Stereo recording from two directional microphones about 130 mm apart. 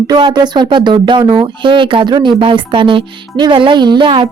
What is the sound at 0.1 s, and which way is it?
Speech, 35° right (ahead or behind).